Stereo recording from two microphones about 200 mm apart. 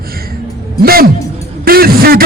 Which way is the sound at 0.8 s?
50° right (ahead or behind).